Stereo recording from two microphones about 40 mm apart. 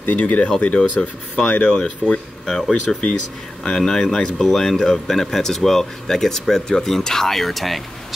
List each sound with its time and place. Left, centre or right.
0.1 s speech: left; by 7.8 s centre